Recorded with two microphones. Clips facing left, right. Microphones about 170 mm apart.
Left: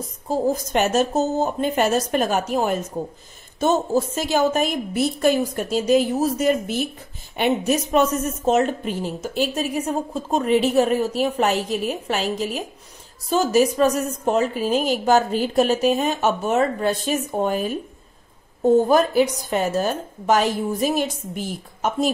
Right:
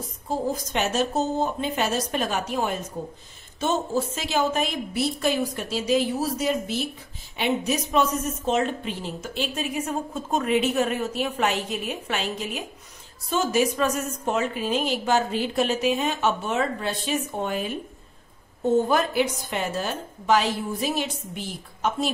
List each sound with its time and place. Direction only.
0.5 s a woman's voice: 45° left (ahead or behind)